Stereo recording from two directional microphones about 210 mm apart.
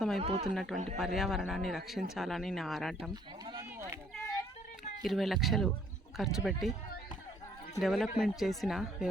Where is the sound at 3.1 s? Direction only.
20° right (ahead or behind).